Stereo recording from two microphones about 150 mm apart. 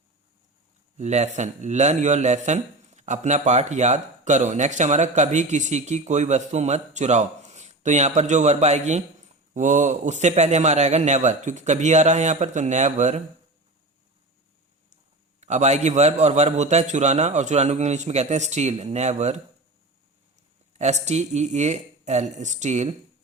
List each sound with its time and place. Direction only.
0.9 s a man's voice: 50° right (ahead or behind)
15.4 s a man's voice: 50° right (ahead or behind)
20.7 s a man's voice: 50° right (ahead or behind)